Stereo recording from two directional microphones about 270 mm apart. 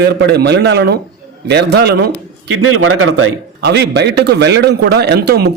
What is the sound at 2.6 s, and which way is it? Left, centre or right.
Speech, right.